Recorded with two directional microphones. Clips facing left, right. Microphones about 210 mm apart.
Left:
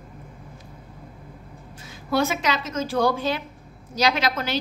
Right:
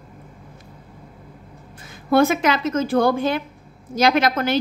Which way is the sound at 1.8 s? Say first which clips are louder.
Right 7 dB; 55° right (ahead or behind).